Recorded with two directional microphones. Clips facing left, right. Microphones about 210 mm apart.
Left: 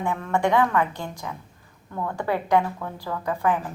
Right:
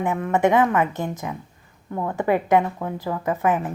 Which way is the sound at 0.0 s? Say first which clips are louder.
Right 4 dB; 20° right (ahead or behind).